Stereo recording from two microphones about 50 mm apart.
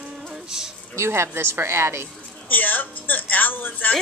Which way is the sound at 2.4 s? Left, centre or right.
Left.